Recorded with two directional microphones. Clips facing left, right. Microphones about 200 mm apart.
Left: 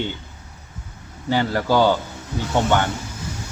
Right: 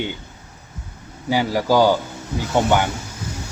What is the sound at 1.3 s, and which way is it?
Speech, 10° right (ahead or behind).